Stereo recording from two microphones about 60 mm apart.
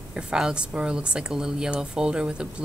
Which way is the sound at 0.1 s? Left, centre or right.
Centre.